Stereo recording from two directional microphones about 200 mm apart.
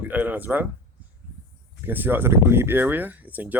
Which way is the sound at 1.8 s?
10° right (ahead or behind).